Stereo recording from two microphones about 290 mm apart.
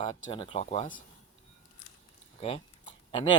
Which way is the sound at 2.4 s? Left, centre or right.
Centre.